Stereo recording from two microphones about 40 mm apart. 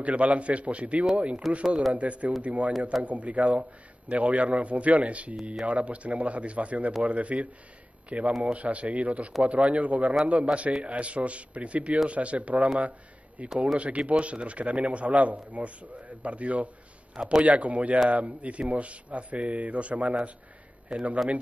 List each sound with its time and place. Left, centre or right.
0.0 s a man's voice: right
17.1 s a man's voice: centre
17.4 s a man's voice: right
20.9 s speech: right